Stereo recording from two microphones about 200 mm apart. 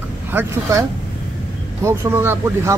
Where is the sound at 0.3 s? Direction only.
15° right (ahead or behind).